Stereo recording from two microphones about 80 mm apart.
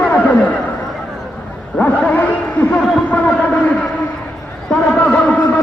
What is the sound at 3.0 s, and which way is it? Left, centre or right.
Speech, centre.